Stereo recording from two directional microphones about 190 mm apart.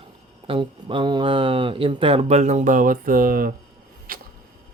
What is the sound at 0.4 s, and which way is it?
Speech, 25° right (ahead or behind).